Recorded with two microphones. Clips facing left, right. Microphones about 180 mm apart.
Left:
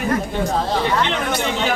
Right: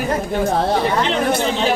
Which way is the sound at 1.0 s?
35° right (ahead or behind).